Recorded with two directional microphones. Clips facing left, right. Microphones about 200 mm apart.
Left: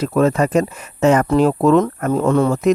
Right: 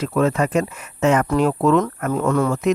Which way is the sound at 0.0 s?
40° left (ahead or behind).